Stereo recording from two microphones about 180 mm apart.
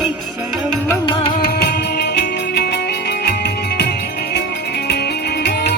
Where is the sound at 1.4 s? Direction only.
60° left (ahead or behind).